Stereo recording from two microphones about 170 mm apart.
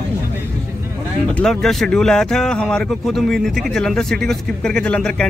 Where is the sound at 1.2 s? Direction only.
5° left (ahead or behind).